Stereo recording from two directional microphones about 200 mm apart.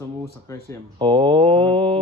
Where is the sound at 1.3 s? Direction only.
5° left (ahead or behind).